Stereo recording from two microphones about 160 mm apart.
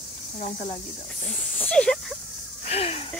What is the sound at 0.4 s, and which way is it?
Speech, 45° left (ahead or behind).